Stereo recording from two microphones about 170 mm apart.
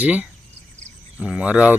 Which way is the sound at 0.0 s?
10° right (ahead or behind).